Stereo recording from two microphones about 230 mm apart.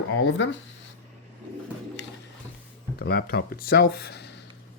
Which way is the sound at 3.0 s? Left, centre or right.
Left.